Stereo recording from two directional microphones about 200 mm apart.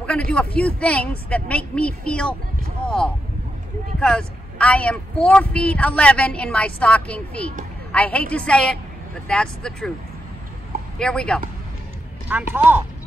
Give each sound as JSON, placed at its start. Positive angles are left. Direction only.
{"t": 0.0, "sound": "a woman's voice", "side_deg": 5}
{"t": 4.0, "sound": "a woman's voice", "side_deg": 5}
{"t": 11.0, "sound": "a woman's voice", "side_deg": 5}
{"t": 12.3, "sound": "speech", "side_deg": -10}